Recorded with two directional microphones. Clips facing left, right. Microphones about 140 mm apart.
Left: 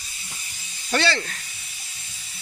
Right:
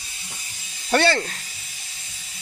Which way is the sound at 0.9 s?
50° right (ahead or behind).